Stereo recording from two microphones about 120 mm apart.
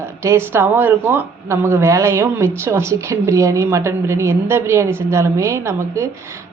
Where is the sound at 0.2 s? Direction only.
20° right (ahead or behind).